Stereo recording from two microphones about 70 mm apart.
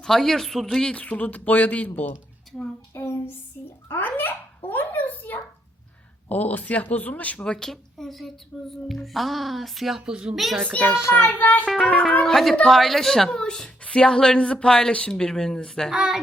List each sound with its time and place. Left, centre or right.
0.0 s a child's voice: centre
0.9 s speech: centre
2.9 s a sound: left
6.2 s speech: left
7.4 s a child's voice: centre
10.1 s speech: centre
10.3 s a child's voice: centre
10.7 s speech: centre
11.9 s a woman's voice: centre
15.9 s speech: centre